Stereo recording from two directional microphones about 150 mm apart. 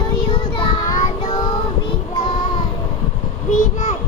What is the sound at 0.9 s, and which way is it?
Music, 60° left (ahead or behind).